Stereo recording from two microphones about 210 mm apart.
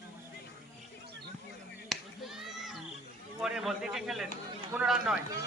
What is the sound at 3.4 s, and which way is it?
Speech, centre (ahead or behind).